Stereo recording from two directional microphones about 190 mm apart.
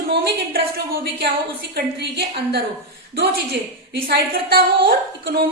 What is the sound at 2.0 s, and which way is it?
Speech, 60° right (ahead or behind).